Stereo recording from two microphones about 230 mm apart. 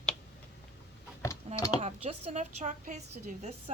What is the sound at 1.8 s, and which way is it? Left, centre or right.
Speech, right.